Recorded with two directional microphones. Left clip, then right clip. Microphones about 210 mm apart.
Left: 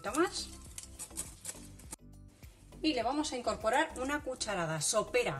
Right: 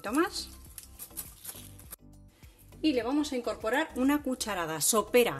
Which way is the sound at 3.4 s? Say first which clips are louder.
Right 1 dB; 35° right (ahead or behind).